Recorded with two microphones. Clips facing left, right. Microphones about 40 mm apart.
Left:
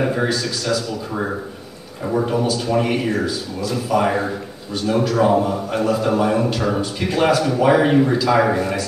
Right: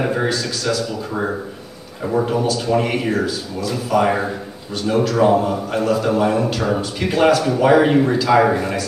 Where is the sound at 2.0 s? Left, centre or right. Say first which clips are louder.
Right 1 dB; centre.